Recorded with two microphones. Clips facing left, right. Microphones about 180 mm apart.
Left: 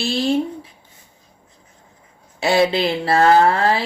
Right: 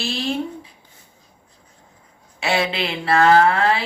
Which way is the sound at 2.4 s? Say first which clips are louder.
Left 6 dB; 35° left (ahead or behind).